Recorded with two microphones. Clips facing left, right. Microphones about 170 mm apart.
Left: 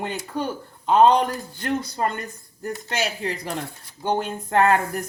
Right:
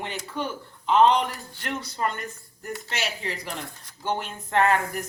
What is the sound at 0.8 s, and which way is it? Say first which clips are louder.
Speech: left 3 dB; 40° left (ahead or behind).